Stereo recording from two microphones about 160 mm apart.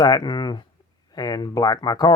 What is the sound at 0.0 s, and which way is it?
Speech, 25° left (ahead or behind).